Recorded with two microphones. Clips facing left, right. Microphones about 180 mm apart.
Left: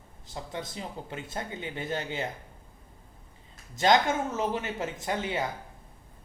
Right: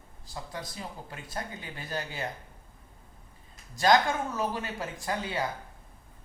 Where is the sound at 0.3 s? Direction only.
25° left (ahead or behind).